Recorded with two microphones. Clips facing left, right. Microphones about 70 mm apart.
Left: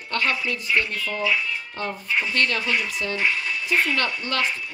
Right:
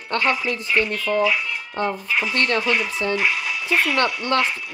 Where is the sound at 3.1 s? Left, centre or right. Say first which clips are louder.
Even; right.